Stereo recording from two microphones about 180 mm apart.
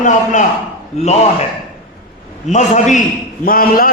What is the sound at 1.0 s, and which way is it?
Speech, 35° left (ahead or behind).